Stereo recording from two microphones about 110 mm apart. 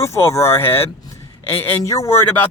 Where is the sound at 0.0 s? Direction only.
25° left (ahead or behind).